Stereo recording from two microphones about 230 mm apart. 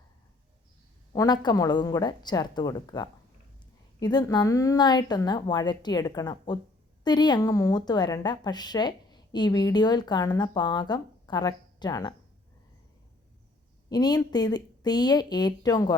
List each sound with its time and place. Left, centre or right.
1.1 s a woman's voice: centre
13.9 s a woman's voice: centre